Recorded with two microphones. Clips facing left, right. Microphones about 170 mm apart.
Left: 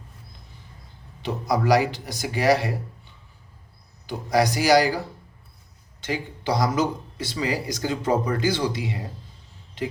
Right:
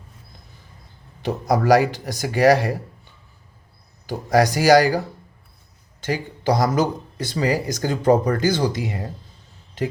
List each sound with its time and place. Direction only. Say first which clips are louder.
1.2 s speech: right 3 dB; 45° right (ahead or behind)
4.3 s speech: right 4 dB; 45° right (ahead or behind)
6.1 s speech: right 5 dB; 45° right (ahead or behind)